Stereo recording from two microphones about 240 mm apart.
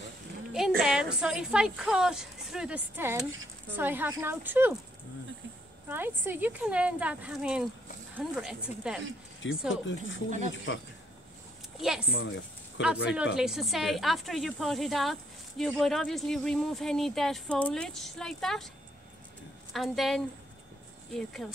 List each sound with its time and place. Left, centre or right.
0.5 s a woman's voice: centre
5.9 s speech: centre
9.7 s speech: left
11.8 s speech: centre
12.1 s speech: left
13.4 s speech: centre
19.7 s speech: centre